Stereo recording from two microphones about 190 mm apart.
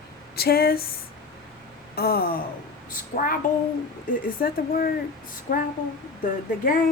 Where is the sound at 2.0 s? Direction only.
55° left (ahead or behind).